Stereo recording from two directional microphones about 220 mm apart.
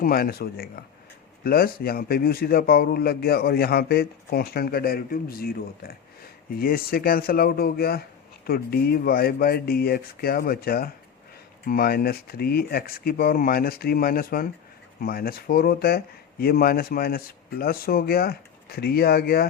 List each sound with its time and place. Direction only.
0.0 s a man's voice: 40° left (ahead or behind)